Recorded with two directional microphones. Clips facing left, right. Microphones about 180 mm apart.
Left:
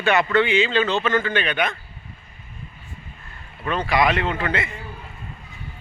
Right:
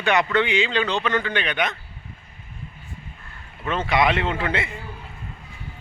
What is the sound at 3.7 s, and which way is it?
Speech, 25° right (ahead or behind).